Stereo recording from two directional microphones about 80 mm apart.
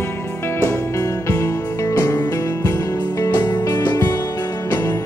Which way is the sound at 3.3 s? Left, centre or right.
Left.